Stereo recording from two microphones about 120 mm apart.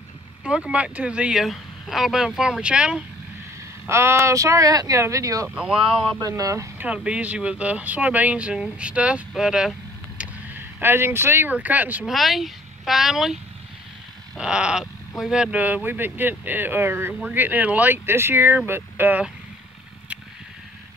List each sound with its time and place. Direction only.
0.4 s speech: 10° right (ahead or behind)
3.8 s speech: 20° right (ahead or behind)
5.5 s speech: 5° right (ahead or behind)
6.1 s speech: 30° right (ahead or behind)
6.9 s speech: 10° right (ahead or behind)
12.1 s speech: centre (ahead or behind)